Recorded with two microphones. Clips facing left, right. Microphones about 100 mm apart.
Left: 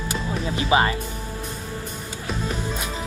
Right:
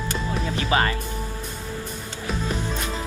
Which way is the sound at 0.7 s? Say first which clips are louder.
Left 3 dB; 20° left (ahead or behind).